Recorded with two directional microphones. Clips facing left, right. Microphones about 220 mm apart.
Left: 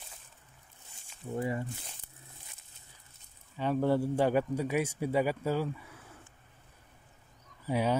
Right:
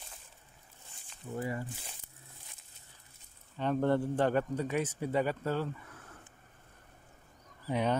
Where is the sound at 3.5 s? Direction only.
5° left (ahead or behind).